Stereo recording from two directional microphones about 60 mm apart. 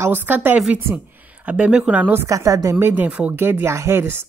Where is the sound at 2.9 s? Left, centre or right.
Right.